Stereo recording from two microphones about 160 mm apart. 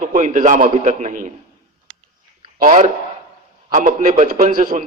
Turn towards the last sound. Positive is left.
turn(degrees=-60)  # may be behind; listen again after turning